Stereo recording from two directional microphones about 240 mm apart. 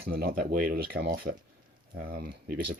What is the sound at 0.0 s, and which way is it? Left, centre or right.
Speech, right.